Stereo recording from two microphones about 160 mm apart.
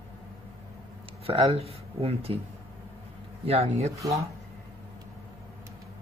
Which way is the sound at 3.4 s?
40° right (ahead or behind).